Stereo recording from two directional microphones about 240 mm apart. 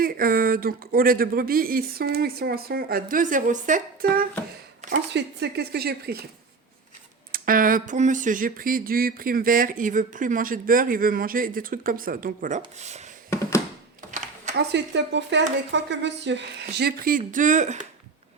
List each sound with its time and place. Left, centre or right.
0.0 s speech: right
5.1 s speech: right
7.3 s speech: right
13.3 s a sound: centre
14.5 s speech: right